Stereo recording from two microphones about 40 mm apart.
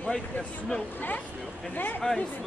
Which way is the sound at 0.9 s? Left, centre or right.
Left.